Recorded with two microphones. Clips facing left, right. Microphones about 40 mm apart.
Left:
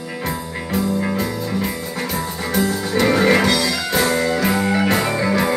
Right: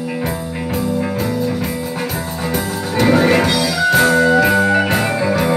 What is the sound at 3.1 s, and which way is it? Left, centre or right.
Music, centre.